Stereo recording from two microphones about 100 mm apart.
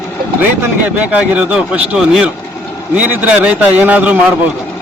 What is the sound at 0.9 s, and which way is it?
A man's voice, 15° right (ahead or behind).